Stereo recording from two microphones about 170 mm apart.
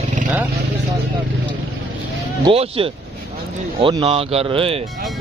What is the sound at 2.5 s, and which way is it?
Speech, 35° right (ahead or behind).